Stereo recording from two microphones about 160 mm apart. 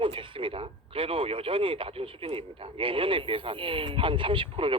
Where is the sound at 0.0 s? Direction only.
35° right (ahead or behind).